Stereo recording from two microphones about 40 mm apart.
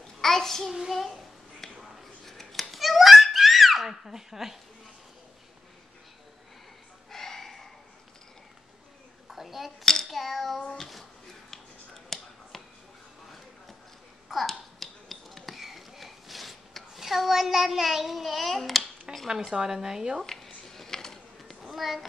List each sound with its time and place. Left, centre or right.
0.0 s child singing: centre
0.7 s a sound: centre
7.1 s a sound: centre
9.3 s a child's voice: centre
10.0 s child singing: centre
10.8 s speech: centre
11.5 s finger snapping: centre
14.5 s finger snapping: centre
19.1 s dishes: centre
19.5 s a woman's voice: centre
20.2 s a sound: centre
21.5 s a sound: centre